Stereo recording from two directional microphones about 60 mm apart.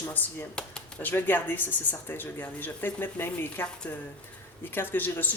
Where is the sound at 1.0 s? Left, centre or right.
Left.